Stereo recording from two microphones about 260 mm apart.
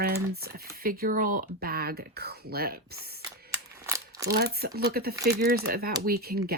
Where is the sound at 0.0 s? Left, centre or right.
Right.